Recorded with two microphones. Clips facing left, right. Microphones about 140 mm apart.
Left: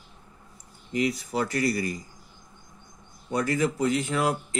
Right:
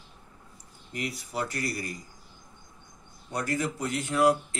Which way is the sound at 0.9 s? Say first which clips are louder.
Left 7 dB; 90° left.